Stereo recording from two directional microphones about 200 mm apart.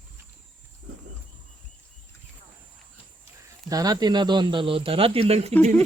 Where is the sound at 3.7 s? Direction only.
20° right (ahead or behind).